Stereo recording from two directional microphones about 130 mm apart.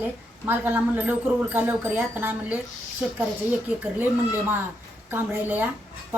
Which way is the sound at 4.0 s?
15° right (ahead or behind).